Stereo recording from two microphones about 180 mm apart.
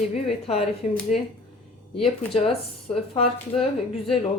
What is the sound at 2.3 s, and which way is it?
Speech, 35° left (ahead or behind).